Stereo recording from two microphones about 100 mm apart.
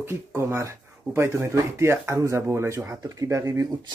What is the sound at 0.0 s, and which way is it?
Speech, 25° right (ahead or behind).